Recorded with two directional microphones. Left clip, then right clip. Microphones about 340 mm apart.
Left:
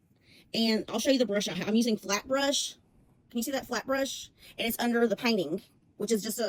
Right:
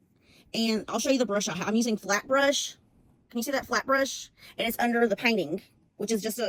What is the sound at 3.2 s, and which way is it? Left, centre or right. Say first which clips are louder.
A woman's voice: right 4 dB; right.